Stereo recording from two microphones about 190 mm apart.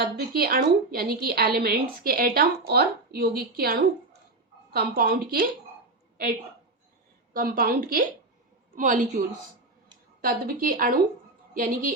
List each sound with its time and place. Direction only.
0.0 s a woman's voice: 55° right (ahead or behind)
7.3 s a woman's voice: 50° right (ahead or behind)